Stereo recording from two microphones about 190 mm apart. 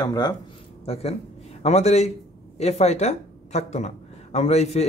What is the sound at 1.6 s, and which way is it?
Speech, 35° left (ahead or behind).